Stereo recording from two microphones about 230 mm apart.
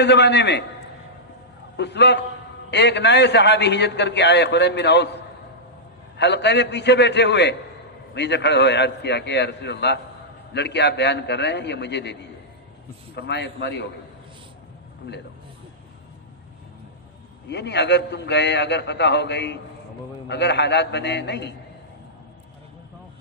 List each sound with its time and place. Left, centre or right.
0.0 s a man's voice: left
1.8 s a man's voice: left
6.1 s a man's voice: left
17.5 s a man's voice: left